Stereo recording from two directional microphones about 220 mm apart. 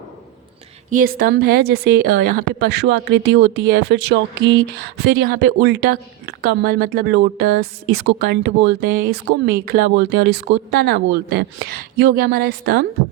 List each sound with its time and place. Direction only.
0.9 s a woman's voice: 40° right (ahead or behind)